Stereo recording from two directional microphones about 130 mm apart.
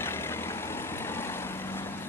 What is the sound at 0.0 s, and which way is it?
Vehicle, 20° left (ahead or behind).